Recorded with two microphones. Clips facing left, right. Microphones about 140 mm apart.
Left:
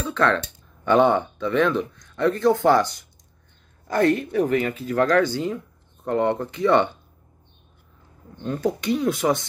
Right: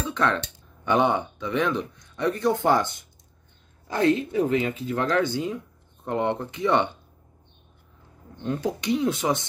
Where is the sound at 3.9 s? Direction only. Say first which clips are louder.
Left 2 dB; 55° left (ahead or behind).